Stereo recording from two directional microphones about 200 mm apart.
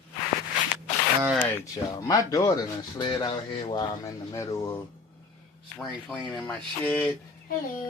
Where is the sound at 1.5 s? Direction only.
15° left (ahead or behind).